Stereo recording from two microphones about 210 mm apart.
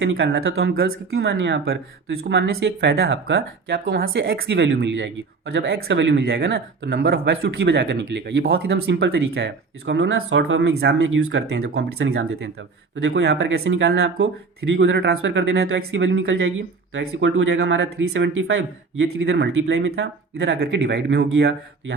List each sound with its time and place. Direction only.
0.0 s speech: 65° right (ahead or behind)
11.8 s speech: 55° right (ahead or behind)
12.1 s speech: 80° right
13.0 s speech: 60° right (ahead or behind)